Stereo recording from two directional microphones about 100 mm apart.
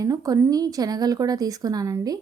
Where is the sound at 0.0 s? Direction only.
35° right (ahead or behind).